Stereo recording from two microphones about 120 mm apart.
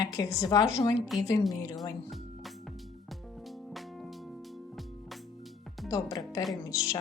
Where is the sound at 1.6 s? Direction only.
30° left (ahead or behind).